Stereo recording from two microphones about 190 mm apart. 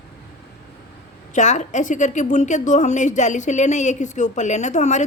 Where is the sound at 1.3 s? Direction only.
40° left (ahead or behind).